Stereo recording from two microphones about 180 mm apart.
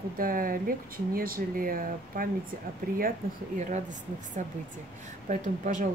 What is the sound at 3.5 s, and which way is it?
Speech, 40° right (ahead or behind).